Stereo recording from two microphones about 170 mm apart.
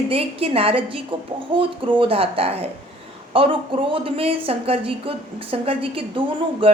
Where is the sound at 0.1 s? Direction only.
35° right (ahead or behind).